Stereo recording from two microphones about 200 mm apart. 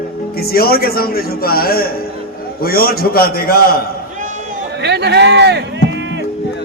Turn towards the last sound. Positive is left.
turn(degrees=-65)  # may be behind; listen again after turning